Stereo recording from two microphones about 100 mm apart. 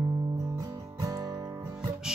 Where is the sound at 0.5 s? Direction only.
35° right (ahead or behind).